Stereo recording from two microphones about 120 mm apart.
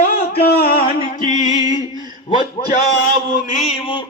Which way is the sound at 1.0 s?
90° left.